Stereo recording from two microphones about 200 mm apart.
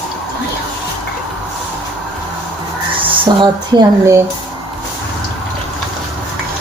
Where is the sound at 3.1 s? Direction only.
20° right (ahead or behind).